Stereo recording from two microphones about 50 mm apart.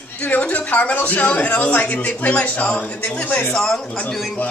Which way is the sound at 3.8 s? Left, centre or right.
Left.